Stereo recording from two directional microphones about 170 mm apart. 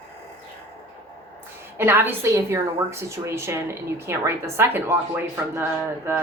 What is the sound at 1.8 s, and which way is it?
A woman's voice, 15° right (ahead or behind).